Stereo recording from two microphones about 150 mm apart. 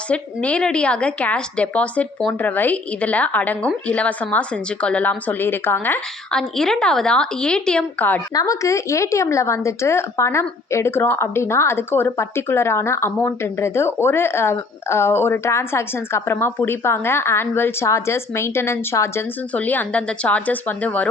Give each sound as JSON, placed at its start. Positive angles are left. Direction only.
{"t": 0.1, "sound": "a woman's voice", "side_deg": 10}
{"t": 8.3, "sound": "a woman's voice", "side_deg": 25}